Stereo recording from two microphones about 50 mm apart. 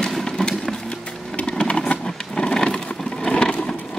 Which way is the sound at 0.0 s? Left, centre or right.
Centre.